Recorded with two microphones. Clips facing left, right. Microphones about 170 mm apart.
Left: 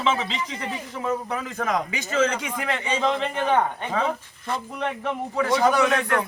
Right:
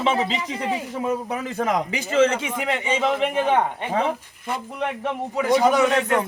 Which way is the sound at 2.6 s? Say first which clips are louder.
Right 1 dB; 20° right (ahead or behind).